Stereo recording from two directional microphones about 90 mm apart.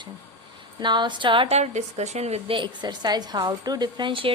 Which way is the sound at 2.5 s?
60° right (ahead or behind).